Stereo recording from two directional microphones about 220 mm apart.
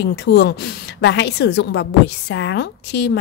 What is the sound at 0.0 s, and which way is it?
A woman's voice, 50° left (ahead or behind).